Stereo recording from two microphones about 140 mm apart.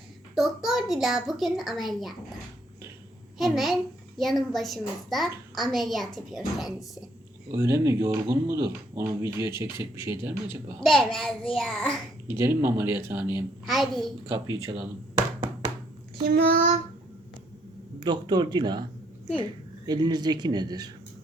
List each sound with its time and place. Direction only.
0.3 s a child's voice: centre (ahead or behind)
3.3 s a child's voice: centre (ahead or behind)
7.5 s speech: 20° right (ahead or behind)
10.8 s a child's voice: 5° left (ahead or behind)
12.3 s speech: 15° right (ahead or behind)
13.7 s a child's voice: centre (ahead or behind)
14.5 s speech: 30° right (ahead or behind)
16.2 s child singing: 90° right
18.0 s speech: 30° right (ahead or behind)